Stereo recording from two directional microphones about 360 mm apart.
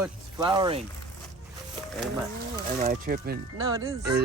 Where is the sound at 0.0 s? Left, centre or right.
Centre.